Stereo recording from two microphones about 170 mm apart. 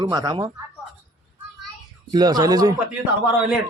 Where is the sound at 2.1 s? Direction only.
25° right (ahead or behind).